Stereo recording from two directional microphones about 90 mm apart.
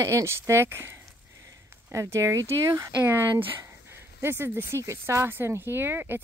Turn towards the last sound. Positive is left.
turn(degrees=-25)  # may be behind; listen again after turning